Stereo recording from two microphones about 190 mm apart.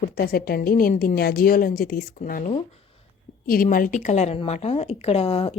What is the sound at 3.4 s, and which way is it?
Speech, 50° left (ahead or behind).